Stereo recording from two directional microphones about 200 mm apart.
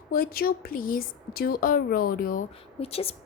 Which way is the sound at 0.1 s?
50° left (ahead or behind).